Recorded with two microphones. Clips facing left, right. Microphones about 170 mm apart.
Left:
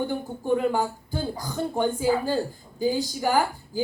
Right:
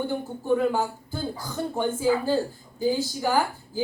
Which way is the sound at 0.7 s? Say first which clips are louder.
Left 1 dB; 15° left (ahead or behind).